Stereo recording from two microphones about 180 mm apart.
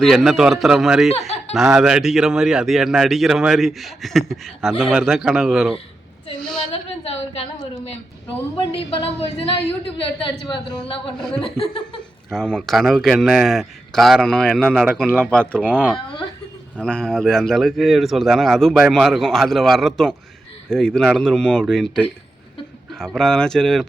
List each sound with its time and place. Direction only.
0.0 s speech: centre (ahead or behind)
7.0 s a sound: 35° left (ahead or behind)
9.0 s a woman's voice: 30° left (ahead or behind)
11.2 s speech: 5° left (ahead or behind)
11.4 s a woman's voice: 30° left (ahead or behind)
12.3 s speech: 5° left (ahead or behind)
15.6 s speech: 5° right (ahead or behind)
16.7 s speech: 5° left (ahead or behind)